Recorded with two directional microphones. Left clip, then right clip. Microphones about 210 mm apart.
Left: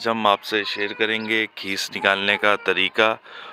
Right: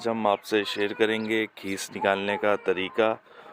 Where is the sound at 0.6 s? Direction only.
25° right (ahead or behind).